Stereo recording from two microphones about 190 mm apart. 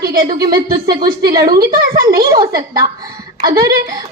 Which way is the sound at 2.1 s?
15° right (ahead or behind).